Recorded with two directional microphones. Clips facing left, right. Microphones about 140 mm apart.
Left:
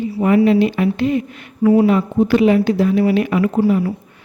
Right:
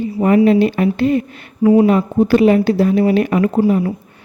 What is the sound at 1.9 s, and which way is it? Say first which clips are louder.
Speech: right 2 dB; 40° right (ahead or behind).